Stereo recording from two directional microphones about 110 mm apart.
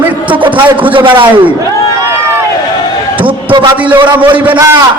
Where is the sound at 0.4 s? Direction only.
50° right (ahead or behind).